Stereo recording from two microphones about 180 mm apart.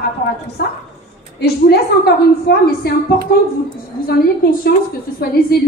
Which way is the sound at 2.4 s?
60° left (ahead or behind).